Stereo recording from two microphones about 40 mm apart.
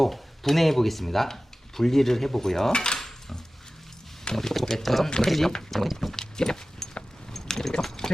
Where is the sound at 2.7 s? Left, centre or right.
Left.